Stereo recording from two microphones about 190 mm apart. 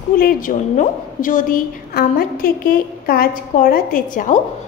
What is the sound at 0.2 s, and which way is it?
A woman's voice, 50° left (ahead or behind).